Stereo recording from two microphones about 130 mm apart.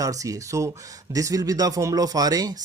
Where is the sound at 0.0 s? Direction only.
25° right (ahead or behind).